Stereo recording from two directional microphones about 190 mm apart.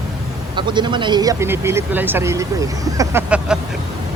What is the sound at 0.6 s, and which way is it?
Speech, 25° right (ahead or behind).